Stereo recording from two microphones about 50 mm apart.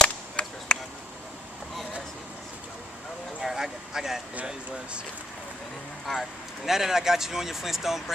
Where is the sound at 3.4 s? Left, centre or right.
Centre.